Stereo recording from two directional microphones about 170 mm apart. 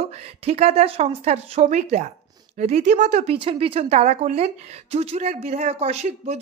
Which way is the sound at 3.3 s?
30° right (ahead or behind).